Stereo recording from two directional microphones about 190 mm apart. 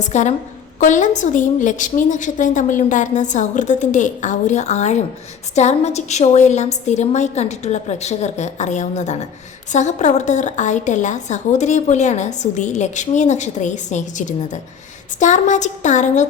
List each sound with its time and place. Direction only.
0.0 s a woman's voice: 40° left (ahead or behind)